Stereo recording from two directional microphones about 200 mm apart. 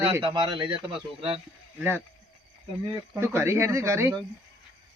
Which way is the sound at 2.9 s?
10° right (ahead or behind).